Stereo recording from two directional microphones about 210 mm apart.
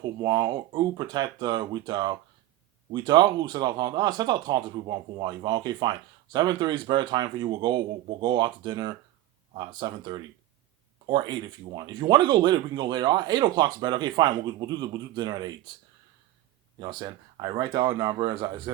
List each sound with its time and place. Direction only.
0.0 s speech: 20° right (ahead or behind)
16.8 s speech: 20° right (ahead or behind)